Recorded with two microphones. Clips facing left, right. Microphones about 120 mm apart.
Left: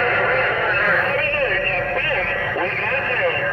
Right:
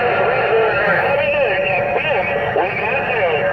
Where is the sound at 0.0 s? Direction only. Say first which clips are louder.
Right 4 dB; 20° right (ahead or behind).